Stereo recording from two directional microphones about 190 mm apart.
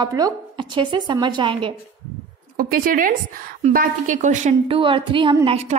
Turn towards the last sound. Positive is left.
turn(degrees=-25)  # may be behind; listen again after turning